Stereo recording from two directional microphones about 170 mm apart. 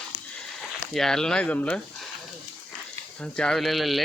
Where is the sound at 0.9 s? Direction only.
5° left (ahead or behind).